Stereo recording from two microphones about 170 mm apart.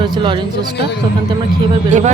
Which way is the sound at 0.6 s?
75° left (ahead or behind).